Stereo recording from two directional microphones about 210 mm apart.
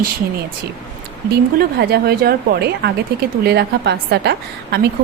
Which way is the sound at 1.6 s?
50° right (ahead or behind).